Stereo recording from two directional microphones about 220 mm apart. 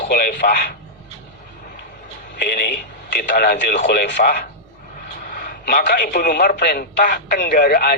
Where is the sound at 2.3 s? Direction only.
45° left (ahead or behind).